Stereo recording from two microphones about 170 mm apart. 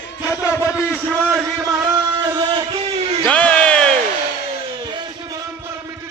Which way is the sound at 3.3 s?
10° left (ahead or behind).